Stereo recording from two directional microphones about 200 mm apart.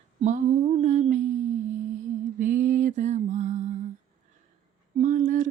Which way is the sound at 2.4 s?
40° right (ahead or behind).